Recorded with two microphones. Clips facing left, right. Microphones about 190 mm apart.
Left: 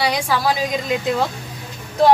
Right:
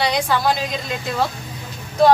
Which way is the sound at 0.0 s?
5° left (ahead or behind).